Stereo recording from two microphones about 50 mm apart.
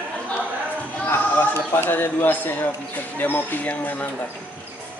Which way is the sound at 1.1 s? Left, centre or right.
Left.